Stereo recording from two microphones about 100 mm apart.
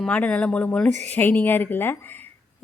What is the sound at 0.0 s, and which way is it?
A woman's voice, 15° left (ahead or behind).